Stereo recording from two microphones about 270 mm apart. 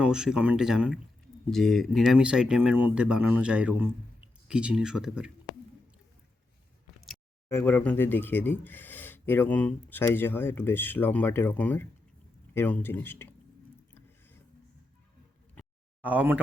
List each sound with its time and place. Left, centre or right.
0.0 s speech: centre
7.0 s speech: centre
16.0 s speech: centre